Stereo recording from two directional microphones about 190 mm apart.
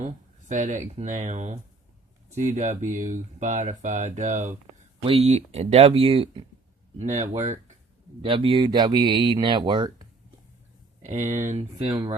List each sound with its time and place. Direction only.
0.0 s speech: 40° right (ahead or behind)
8.2 s speech: 30° right (ahead or behind)
11.0 s speech: 40° right (ahead or behind)